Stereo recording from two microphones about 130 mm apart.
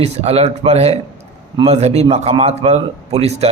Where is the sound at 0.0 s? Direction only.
55° right (ahead or behind).